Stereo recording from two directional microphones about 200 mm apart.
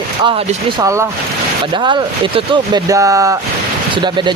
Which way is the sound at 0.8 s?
15° right (ahead or behind).